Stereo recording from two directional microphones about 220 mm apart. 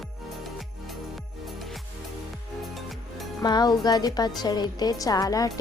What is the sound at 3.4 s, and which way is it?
Speech, 20° left (ahead or behind).